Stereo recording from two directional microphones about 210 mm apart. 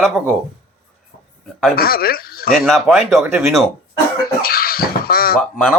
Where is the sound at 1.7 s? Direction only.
45° left (ahead or behind).